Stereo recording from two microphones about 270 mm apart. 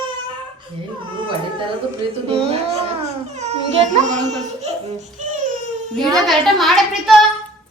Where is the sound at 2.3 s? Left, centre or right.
Right.